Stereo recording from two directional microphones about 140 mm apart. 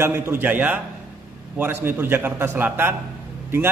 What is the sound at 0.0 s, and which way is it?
A man's voice, 15° right (ahead or behind).